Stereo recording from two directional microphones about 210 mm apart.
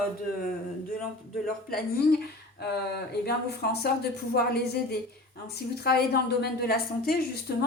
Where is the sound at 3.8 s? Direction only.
50° left (ahead or behind).